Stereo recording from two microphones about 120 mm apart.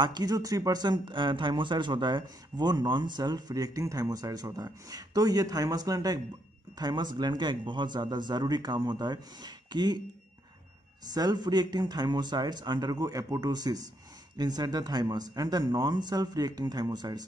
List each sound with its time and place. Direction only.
0.0 s speech: 35° right (ahead or behind)
11.1 s speech: 35° right (ahead or behind)